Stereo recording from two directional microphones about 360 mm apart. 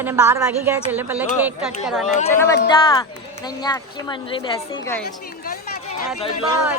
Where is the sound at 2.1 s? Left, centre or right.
Centre.